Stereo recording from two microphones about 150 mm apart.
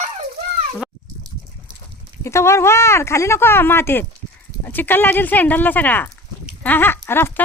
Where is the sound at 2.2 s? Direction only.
20° left (ahead or behind).